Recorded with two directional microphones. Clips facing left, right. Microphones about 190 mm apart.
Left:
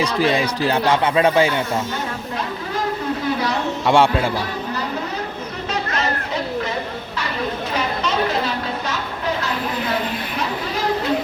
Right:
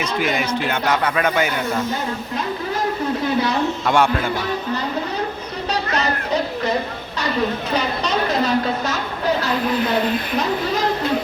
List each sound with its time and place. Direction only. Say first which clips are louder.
0.0 s speech: left 3 dB; 30° left (ahead or behind)
3.8 s speech: left 4 dB; 25° left (ahead or behind)